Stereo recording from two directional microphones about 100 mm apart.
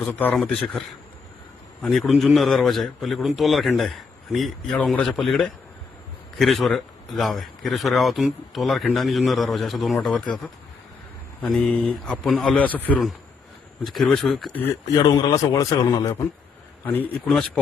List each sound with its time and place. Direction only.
0.0 s speech: 20° left (ahead or behind)
0.3 s a man's voice: 5° left (ahead or behind)
12.2 s speech: centre (ahead or behind)
12.5 s speech: 15° left (ahead or behind)
13.8 s speech: centre (ahead or behind)
15.0 s a man's voice: 40° left (ahead or behind)
16.8 s speech: 15° left (ahead or behind)